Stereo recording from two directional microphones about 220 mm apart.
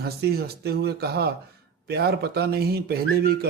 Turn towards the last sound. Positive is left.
turn(degrees=-45)  # may be behind; listen again after turning